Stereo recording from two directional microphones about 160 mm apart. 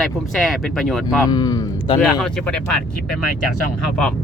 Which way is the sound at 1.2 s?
25° left (ahead or behind).